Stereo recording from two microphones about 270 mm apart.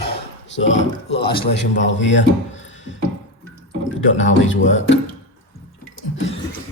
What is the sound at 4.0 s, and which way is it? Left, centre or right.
Speech, left.